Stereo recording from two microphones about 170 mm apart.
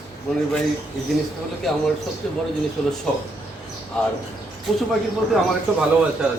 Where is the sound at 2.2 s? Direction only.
5° left (ahead or behind).